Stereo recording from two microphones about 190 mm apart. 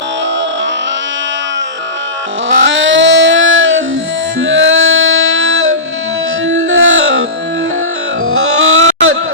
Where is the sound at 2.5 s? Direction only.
90° right.